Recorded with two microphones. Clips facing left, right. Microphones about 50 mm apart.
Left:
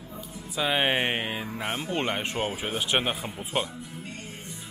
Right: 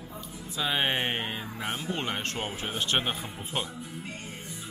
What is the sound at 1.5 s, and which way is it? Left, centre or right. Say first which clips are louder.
Speech: left 3 dB; centre.